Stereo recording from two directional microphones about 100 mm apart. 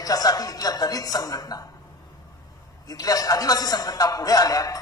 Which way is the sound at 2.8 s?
35° left (ahead or behind).